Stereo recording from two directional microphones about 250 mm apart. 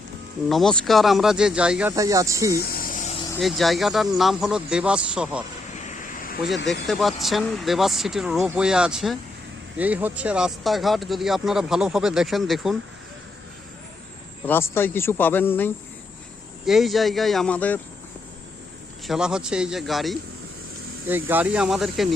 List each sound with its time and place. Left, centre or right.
0.4 s speech: centre
2.6 s a sound: left
3.3 s speech: centre
5.8 s a sound: left
6.8 s speech: centre
14.4 s speech: centre
19.0 s speech: centre
21.2 s speech: centre